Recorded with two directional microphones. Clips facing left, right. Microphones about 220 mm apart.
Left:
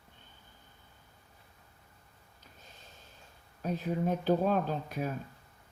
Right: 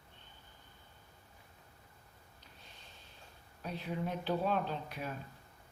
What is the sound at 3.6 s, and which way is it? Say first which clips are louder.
Speech: left 7 dB; 45° left (ahead or behind).